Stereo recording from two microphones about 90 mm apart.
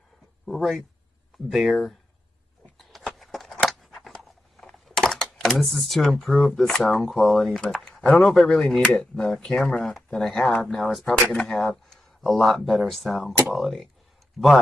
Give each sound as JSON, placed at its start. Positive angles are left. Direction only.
{"t": 0.5, "sound": "speech", "side_deg": 0}
{"t": 3.0, "sound": "a sound", "side_deg": 5}
{"t": 10.1, "sound": "speech", "side_deg": 5}